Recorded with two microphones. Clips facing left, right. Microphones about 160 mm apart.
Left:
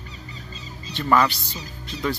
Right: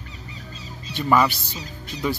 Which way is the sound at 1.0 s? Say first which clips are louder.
Right 1 dB; 10° right (ahead or behind).